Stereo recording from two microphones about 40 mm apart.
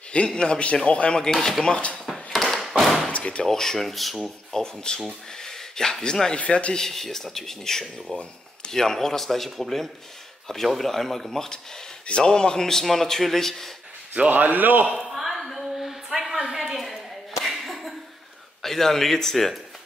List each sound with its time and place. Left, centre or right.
0.1 s a man's voice: left
1.2 s speech: centre
1.6 s a man's voice: left
2.3 s a sound: centre
3.1 s door: left
3.4 s speech: centre
6.4 s speech: left
6.7 s speech: centre
12.3 s speech: centre
14.3 s a man's voice: right
15.0 s a sound: centre
16.8 s a sound: centre
18.6 s speech: centre